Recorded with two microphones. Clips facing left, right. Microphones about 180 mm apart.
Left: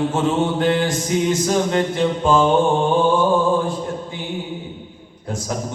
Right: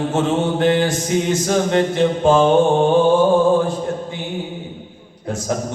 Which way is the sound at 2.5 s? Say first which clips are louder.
Right 3 dB; 45° right (ahead or behind).